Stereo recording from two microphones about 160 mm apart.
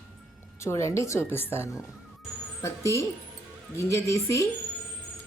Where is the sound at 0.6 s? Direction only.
20° left (ahead or behind).